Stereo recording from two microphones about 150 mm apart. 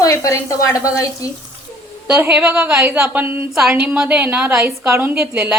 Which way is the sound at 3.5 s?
5° right (ahead or behind).